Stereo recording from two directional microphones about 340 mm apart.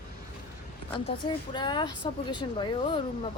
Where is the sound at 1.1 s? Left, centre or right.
Centre.